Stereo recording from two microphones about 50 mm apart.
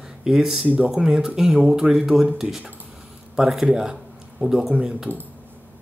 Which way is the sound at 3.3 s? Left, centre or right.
Centre.